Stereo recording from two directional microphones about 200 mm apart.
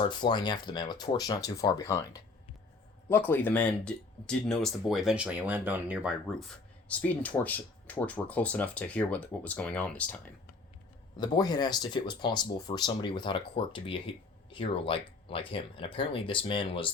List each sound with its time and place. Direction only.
0.1 s speech: 25° left (ahead or behind); by 10.2 s 5° left (ahead or behind)
11.2 s speech: 20° left (ahead or behind)